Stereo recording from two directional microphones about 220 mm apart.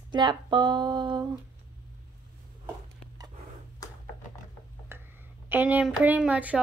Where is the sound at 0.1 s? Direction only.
20° right (ahead or behind).